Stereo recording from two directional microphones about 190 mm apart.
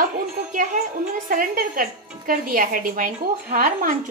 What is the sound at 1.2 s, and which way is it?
A woman's voice, 45° right (ahead or behind).